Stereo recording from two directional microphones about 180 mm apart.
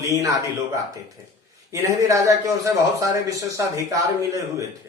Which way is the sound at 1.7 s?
15° right (ahead or behind).